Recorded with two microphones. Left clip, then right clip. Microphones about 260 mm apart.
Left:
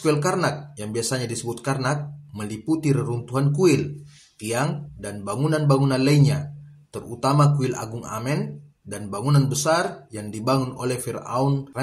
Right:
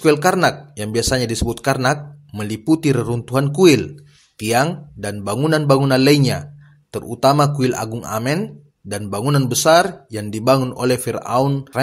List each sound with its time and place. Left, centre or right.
0.0 s speech: right